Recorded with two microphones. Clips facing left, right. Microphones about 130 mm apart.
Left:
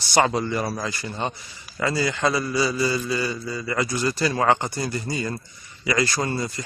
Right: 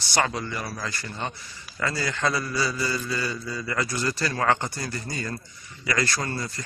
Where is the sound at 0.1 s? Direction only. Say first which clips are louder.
Left 6 dB; 25° left (ahead or behind).